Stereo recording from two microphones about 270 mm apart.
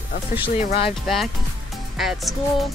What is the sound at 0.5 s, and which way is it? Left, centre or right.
Speech, left.